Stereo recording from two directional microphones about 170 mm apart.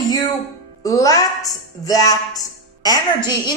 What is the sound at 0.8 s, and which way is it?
A woman's voice, 20° left (ahead or behind).